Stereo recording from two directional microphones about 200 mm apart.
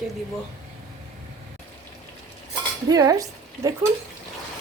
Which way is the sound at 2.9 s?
15° right (ahead or behind).